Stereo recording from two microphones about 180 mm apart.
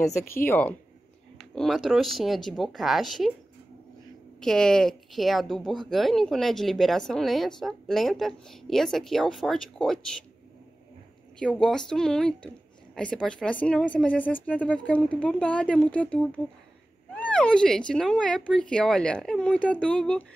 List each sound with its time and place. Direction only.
0.0 s a woman's voice: 50° left (ahead or behind)
0.5 s speech: 10° left (ahead or behind)
4.4 s speech: 5° left (ahead or behind)
11.3 s speech: 5° left (ahead or behind)